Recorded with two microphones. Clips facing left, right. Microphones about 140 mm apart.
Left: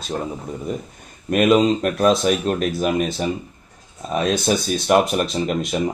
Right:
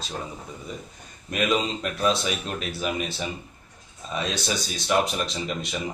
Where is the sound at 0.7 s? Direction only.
50° left (ahead or behind).